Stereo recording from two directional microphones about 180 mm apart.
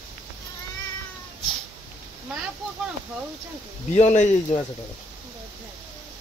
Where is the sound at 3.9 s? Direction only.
40° left (ahead or behind).